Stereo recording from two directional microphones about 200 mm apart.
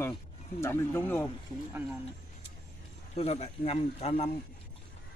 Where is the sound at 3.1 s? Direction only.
30° left (ahead or behind).